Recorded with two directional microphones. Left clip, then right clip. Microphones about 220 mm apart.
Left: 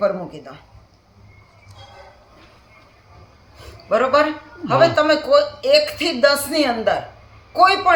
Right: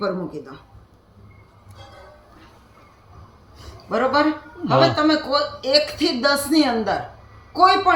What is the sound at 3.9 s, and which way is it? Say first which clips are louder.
A man's voice: left 3 dB; 35° left (ahead or behind).